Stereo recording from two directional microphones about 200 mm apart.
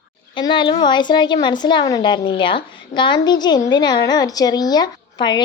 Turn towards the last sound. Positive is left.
turn(degrees=20)  # may be behind; listen again after turning